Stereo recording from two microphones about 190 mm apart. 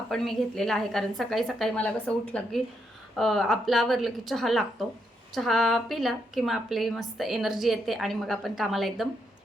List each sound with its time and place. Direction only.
0.1 s a woman's voice: centre (ahead or behind)